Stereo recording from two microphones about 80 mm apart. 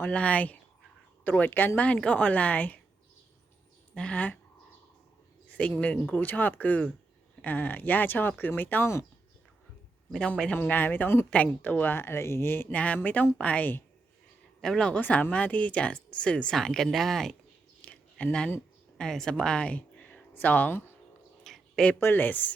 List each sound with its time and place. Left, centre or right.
0.1 s speech: centre
3.9 s speech: centre
5.5 s speech: centre
10.1 s speech: centre
10.6 s speech: left
12.7 s speech: centre
14.6 s speech: centre
17.8 s a sound: centre
18.9 s speech: centre; by 20.9 s left
21.4 s a sound: centre
22.0 s speech: left